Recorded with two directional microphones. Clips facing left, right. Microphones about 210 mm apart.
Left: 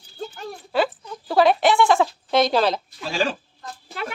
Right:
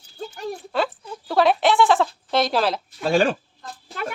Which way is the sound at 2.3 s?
Centre (ahead or behind).